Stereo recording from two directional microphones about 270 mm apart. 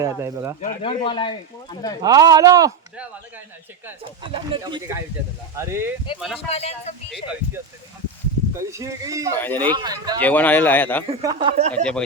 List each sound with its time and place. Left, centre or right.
0.0 s speech: centre
0.6 s speech: left
2.0 s speech: centre
4.2 s speech: centre
6.5 s speech: left
8.5 s speech: centre
9.4 s speech: centre
9.7 s speech: centre
10.2 s speech: centre
11.1 s speech: centre
11.7 s speech: centre